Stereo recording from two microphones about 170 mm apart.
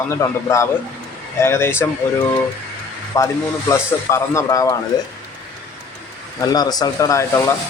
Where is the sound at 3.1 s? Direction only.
20° left (ahead or behind).